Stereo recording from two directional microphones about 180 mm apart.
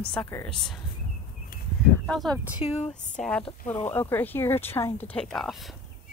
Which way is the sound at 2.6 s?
35° left (ahead or behind).